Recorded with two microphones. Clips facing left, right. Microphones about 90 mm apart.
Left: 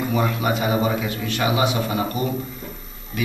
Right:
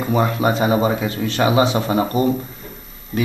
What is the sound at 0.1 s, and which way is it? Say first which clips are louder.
Speech: right 6 dB; 30° right (ahead or behind).